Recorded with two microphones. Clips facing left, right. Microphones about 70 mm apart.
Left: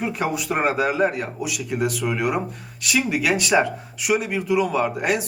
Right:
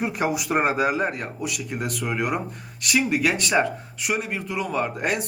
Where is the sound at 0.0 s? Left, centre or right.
Centre.